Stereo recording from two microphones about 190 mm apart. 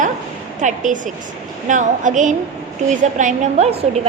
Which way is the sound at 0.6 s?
40° right (ahead or behind).